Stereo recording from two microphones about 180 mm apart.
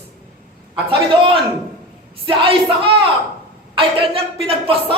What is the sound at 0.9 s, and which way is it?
A woman's voice, 30° right (ahead or behind).